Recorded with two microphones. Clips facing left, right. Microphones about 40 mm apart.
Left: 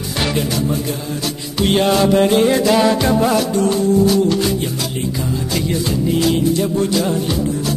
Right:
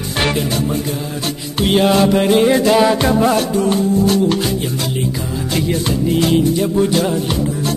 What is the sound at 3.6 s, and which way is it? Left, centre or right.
Music, right.